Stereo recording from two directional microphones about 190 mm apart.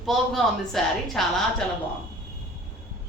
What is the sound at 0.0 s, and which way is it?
A woman's voice, centre (ahead or behind).